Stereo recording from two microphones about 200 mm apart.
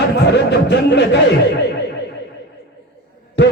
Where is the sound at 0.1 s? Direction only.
55° left (ahead or behind).